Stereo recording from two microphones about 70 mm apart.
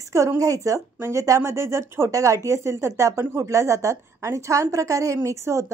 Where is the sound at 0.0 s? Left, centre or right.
Right.